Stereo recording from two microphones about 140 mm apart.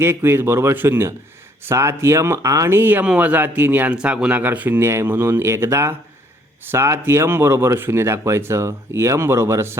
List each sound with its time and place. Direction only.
0.0 s speech: 15° right (ahead or behind)